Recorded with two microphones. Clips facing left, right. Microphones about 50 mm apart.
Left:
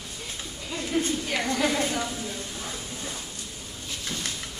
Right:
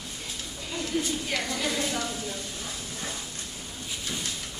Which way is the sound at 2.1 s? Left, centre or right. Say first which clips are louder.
Left 1 dB; centre.